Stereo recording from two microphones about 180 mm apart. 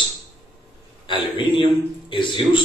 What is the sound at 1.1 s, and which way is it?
A man's voice, 25° left (ahead or behind).